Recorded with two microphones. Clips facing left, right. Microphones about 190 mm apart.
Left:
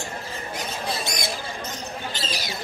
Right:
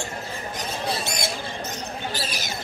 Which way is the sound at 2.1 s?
20° left (ahead or behind).